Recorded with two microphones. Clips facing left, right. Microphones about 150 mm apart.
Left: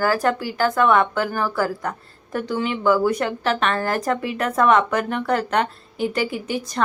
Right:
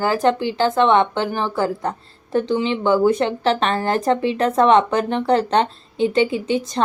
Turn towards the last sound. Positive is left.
turn(degrees=-25)  # may be behind; listen again after turning